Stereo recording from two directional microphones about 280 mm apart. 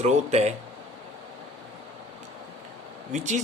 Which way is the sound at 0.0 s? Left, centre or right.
Right.